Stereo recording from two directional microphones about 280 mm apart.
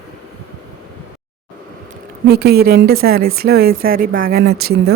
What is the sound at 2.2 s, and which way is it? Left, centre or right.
A woman's voice, right.